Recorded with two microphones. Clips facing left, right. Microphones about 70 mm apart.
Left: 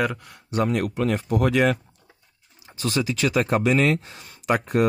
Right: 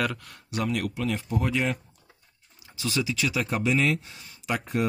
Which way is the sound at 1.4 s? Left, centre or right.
Left.